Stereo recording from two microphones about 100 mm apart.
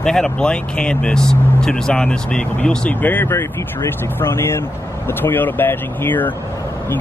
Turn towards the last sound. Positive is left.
turn(degrees=20)  # may be behind; listen again after turning